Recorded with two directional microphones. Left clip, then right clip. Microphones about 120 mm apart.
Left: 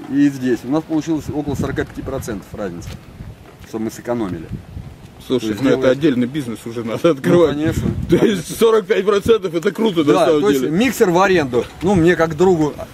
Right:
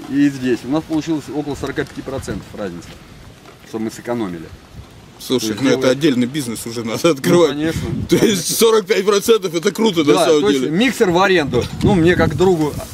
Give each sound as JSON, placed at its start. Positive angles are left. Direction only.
{"t": 0.1, "sound": "speech", "side_deg": 0}
{"t": 3.7, "sound": "speech", "side_deg": 0}
{"t": 5.3, "sound": "speech", "side_deg": -40}
{"t": 7.4, "sound": "speech", "side_deg": 0}
{"t": 7.8, "sound": "speech", "side_deg": -35}
{"t": 10.7, "sound": "speech", "side_deg": 0}